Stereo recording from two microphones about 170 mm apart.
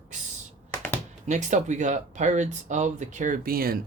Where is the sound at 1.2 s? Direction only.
45° right (ahead or behind).